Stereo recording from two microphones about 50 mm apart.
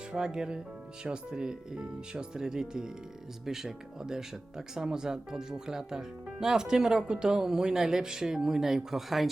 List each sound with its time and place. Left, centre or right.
0.1 s speech: centre